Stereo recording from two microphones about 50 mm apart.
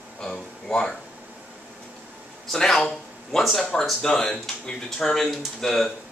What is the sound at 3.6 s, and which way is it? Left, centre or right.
Speech, centre.